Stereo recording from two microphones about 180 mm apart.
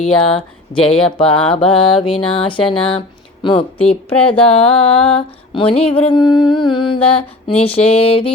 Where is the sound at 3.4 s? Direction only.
30° left (ahead or behind).